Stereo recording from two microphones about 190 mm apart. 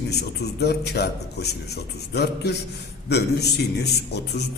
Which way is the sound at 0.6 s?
60° left (ahead or behind).